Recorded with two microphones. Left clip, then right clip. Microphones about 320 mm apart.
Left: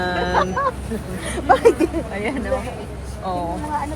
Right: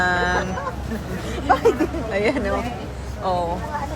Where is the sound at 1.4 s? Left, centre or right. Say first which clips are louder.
Left 3 dB; left.